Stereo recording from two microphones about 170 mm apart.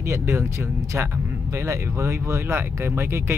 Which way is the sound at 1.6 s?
15° right (ahead or behind).